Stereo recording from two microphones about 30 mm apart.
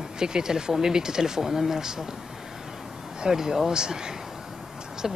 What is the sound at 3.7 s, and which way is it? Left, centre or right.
Speech, right.